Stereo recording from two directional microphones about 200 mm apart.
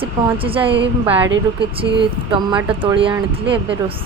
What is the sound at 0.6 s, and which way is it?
Speech, 60° right (ahead or behind).